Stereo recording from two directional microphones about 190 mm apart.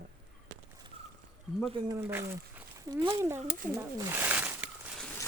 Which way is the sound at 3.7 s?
10° right (ahead or behind).